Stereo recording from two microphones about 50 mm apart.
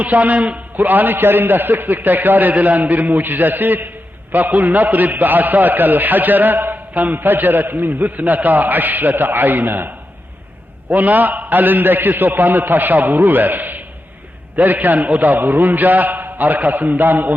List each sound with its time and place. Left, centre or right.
0.0 s a man's voice: right